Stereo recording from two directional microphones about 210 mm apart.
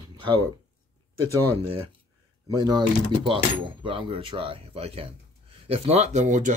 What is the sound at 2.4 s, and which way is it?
Speech, 20° right (ahead or behind).